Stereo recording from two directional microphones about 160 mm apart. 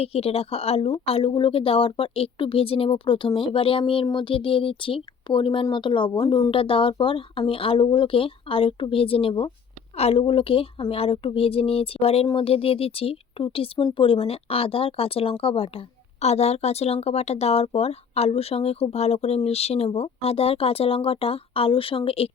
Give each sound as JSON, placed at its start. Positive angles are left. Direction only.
{"t": 0.0, "sound": "speech", "side_deg": 40}
{"t": 6.5, "sound": "speech", "side_deg": 35}